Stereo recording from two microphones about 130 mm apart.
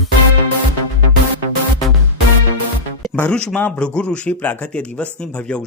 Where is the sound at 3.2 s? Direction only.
10° left (ahead or behind).